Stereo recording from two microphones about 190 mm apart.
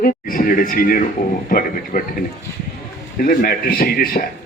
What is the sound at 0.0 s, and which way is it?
A man's voice, 45° left (ahead or behind).